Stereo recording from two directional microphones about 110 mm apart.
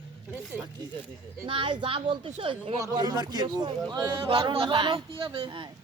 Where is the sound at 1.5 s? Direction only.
50° right (ahead or behind).